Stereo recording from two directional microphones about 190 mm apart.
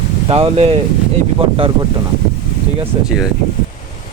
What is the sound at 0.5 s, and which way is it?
Speech, 30° right (ahead or behind).